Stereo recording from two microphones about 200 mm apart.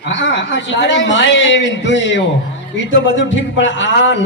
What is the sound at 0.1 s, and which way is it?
A man's voice, 65° left (ahead or behind).